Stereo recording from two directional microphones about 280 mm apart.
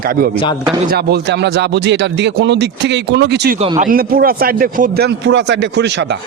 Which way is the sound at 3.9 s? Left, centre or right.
Right.